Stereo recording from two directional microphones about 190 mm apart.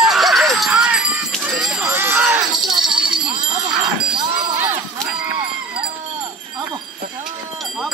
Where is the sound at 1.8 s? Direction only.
15° right (ahead or behind).